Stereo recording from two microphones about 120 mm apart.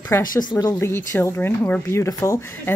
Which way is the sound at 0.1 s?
25° left (ahead or behind).